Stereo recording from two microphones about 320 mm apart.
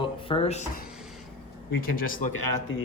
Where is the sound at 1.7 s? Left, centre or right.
Left.